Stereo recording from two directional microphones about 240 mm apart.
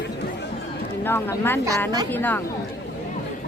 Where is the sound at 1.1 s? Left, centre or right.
Centre.